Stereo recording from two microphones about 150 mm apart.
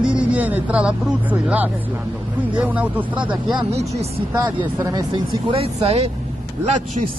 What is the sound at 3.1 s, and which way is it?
Speech, 30° right (ahead or behind).